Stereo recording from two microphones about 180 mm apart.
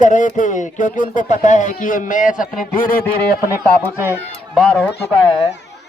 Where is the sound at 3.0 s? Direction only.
15° left (ahead or behind).